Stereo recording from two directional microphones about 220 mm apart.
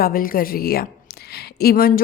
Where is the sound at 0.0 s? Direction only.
40° left (ahead or behind).